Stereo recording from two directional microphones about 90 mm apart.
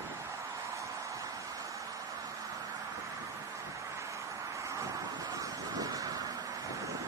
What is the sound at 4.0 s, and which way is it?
Vehicle, 35° right (ahead or behind).